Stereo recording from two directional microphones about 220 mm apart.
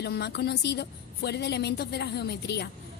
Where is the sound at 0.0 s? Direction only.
50° left (ahead or behind).